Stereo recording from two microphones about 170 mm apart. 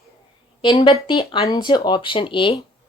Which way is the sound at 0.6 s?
30° left (ahead or behind).